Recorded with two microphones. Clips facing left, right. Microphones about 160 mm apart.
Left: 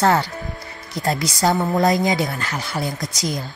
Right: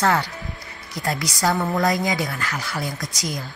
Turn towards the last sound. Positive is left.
turn(degrees=25)  # may be behind; listen again after turning